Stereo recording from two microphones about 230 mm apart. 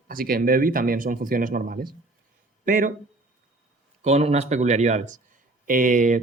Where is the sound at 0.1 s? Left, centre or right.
Right.